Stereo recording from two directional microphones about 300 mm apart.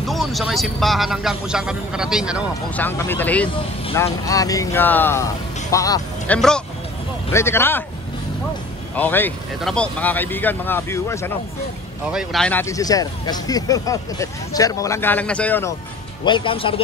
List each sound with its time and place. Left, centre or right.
0.0 s speech: centre
8.9 s speech: centre
16.3 s speech: centre